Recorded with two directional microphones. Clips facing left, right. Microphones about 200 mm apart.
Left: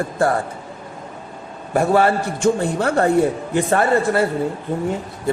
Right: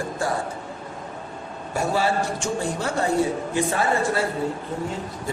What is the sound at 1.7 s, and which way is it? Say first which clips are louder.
A man's voice: left 7 dB; 60° left (ahead or behind).